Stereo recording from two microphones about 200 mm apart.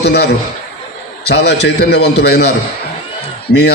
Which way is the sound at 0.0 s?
55° left (ahead or behind).